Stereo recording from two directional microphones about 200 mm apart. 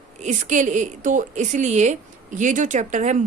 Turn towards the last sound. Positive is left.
turn(degrees=-40)  # may be behind; listen again after turning